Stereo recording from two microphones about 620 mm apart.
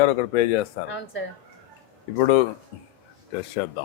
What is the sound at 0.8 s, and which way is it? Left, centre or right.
Speech, left.